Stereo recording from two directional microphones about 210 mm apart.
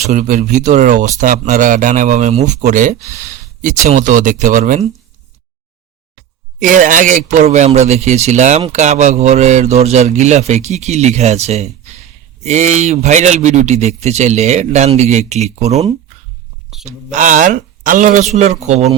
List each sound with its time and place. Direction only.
0.1 s a man's voice: 35° right (ahead or behind)
6.6 s a man's voice: 40° right (ahead or behind)